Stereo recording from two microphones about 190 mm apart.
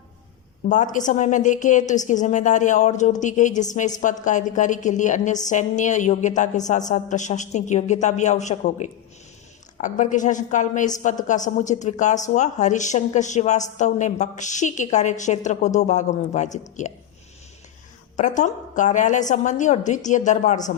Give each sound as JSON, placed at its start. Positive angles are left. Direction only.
{"t": 0.7, "sound": "a woman's voice", "side_deg": 40}
{"t": 18.2, "sound": "a woman's voice", "side_deg": 40}